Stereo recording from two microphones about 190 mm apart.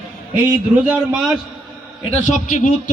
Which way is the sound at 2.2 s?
40° left (ahead or behind).